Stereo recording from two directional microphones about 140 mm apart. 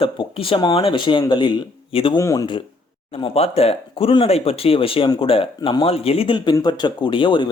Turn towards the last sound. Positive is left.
turn(degrees=35)  # may be behind; listen again after turning